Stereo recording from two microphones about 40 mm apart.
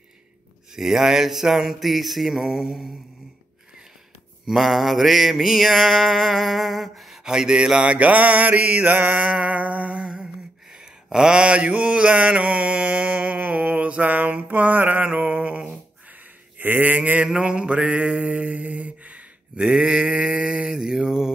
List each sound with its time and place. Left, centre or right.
0.7 s mantra: centre
4.5 s mantra: centre
7.2 s mantra: centre; by 9.1 s right
9.1 s mantra: right
10.7 s mantra: centre; by 13.4 s right
13.4 s mantra: right
14.0 s mantra: right
14.8 s mantra: right
15.0 s mantra: right
16.5 s mantra: right
17.4 s a sound: right